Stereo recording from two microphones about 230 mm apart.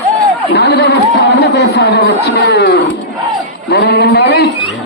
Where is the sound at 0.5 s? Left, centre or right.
Left.